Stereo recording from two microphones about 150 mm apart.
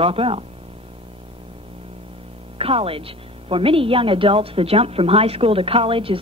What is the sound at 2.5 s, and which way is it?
A woman's voice, 40° right (ahead or behind).